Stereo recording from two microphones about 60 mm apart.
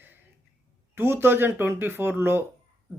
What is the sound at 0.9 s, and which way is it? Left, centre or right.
Speech, right.